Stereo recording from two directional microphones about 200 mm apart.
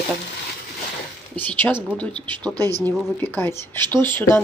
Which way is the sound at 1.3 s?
10° left (ahead or behind).